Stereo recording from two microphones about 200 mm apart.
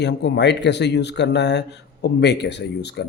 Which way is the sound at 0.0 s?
60° left (ahead or behind).